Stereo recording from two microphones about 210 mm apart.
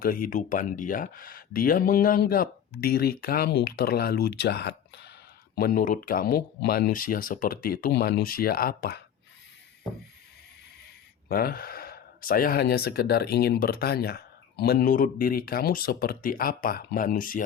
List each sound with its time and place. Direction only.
0.0 s speech: 45° left (ahead or behind)
11.3 s speech: 45° left (ahead or behind)